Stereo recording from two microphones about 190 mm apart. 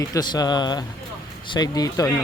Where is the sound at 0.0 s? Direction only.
20° left (ahead or behind).